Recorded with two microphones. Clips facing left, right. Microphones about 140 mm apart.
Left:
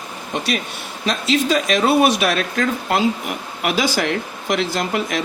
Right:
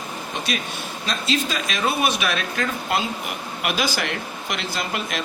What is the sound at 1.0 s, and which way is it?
Speech, 85° left.